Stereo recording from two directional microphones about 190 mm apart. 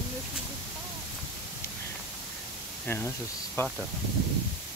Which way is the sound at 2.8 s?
10° left (ahead or behind).